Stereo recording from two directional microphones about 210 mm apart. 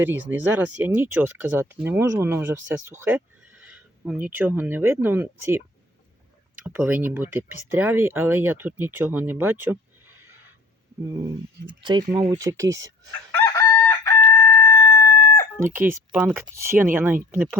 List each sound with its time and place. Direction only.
0.0 s speech: 10° right (ahead or behind)
11.8 s speech: 20° right (ahead or behind)
13.3 s chicken: 10° left (ahead or behind)
15.6 s speech: 10° right (ahead or behind)